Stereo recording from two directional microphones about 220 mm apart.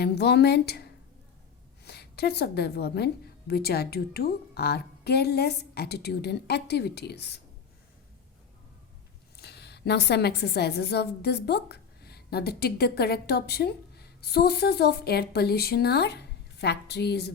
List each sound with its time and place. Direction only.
0.0 s a woman's voice: 50° left (ahead or behind)
9.3 s a woman's voice: 45° left (ahead or behind)